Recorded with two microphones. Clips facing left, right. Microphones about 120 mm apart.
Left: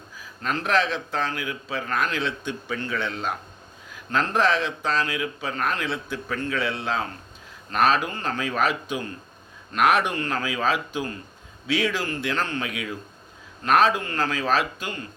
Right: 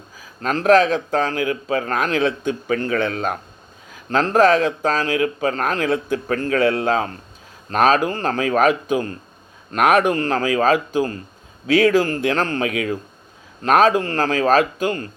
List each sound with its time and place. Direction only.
0.4 s a man's voice: 40° right (ahead or behind)
4.1 s a man's voice: 40° right (ahead or behind)